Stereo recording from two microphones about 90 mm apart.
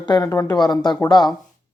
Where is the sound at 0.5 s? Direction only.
50° left (ahead or behind).